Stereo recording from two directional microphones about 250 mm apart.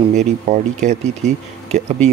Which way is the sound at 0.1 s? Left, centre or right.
Right.